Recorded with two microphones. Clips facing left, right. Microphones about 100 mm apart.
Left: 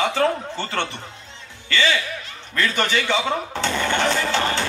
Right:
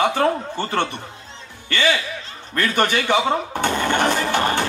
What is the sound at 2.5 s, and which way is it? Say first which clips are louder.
Speech: right 2 dB; 50° right (ahead or behind).